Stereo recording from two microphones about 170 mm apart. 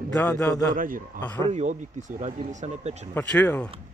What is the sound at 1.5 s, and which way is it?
Speech, 40° right (ahead or behind).